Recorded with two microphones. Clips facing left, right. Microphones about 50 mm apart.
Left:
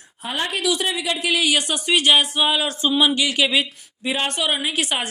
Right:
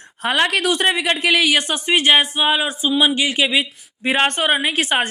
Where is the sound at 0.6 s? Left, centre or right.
Right; by 3.7 s centre.